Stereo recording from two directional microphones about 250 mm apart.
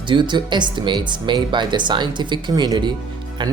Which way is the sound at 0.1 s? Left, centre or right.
Centre.